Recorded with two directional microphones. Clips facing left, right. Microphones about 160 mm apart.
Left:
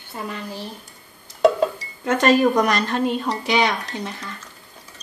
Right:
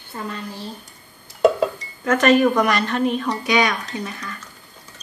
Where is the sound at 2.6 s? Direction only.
40° left (ahead or behind).